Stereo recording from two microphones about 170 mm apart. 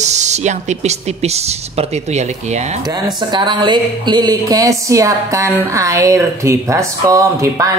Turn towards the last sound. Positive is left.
turn(degrees=-20)  # may be behind; listen again after turning